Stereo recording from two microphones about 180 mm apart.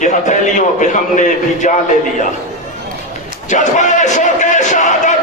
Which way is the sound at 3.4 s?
40° left (ahead or behind).